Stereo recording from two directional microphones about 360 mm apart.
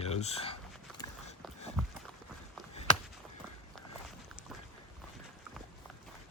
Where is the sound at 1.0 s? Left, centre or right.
Centre.